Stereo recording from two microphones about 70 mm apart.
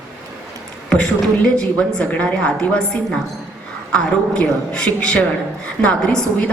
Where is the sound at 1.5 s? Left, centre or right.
Centre.